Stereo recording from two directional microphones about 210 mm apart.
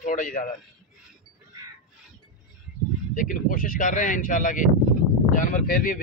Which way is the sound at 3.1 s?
40° left (ahead or behind).